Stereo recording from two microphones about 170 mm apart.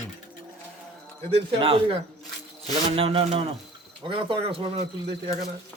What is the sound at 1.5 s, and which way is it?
Speech, 30° right (ahead or behind).